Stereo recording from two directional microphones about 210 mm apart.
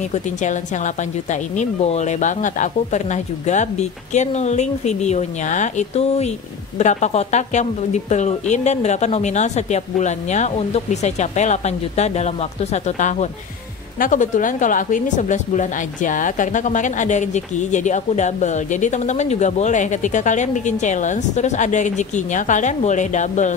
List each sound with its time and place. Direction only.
0.1 s speech: 35° left (ahead or behind)